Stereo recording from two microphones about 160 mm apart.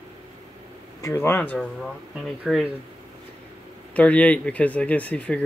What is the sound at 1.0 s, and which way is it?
Speech, 15° left (ahead or behind).